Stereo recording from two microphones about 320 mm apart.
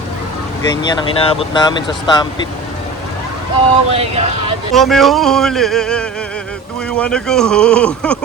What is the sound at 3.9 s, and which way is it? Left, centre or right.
Speech, centre.